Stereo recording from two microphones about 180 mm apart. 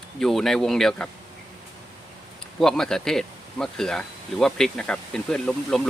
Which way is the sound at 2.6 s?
5° left (ahead or behind).